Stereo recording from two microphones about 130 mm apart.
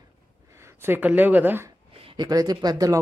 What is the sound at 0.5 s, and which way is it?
Speech, 20° right (ahead or behind).